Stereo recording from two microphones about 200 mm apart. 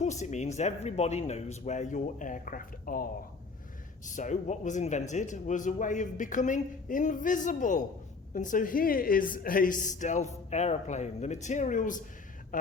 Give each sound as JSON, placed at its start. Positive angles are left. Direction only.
{"t": 0.0, "sound": "a man's voice", "side_deg": 35}